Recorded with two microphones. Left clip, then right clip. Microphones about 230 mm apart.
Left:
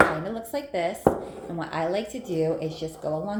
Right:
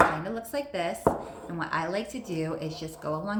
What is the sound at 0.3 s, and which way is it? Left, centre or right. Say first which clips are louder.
Speech: left 2 dB; right.